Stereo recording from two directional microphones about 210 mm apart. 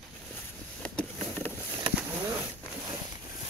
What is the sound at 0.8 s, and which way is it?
Vehicle, 5° left (ahead or behind).